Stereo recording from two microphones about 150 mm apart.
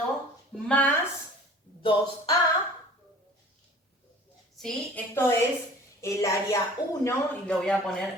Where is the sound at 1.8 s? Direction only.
35° left (ahead or behind).